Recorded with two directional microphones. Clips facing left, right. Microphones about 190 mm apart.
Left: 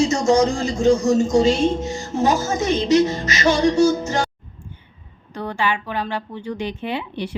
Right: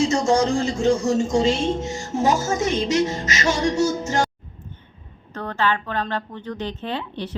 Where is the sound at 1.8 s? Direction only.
25° right (ahead or behind).